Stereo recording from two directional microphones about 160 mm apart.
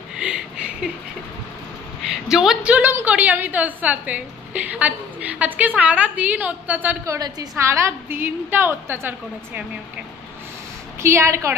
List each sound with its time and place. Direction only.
0.1 s a sound: 5° right (ahead or behind)
2.3 s a woman's voice: 5° right (ahead or behind)
7.2 s a woman's voice: 25° right (ahead or behind)
11.0 s a woman's voice: 15° right (ahead or behind)